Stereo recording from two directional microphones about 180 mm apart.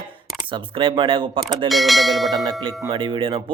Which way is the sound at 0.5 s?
30° right (ahead or behind).